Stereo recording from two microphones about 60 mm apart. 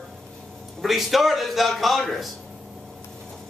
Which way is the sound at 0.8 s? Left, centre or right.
Centre.